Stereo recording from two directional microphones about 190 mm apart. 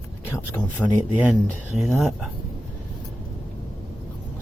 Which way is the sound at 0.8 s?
5° left (ahead or behind).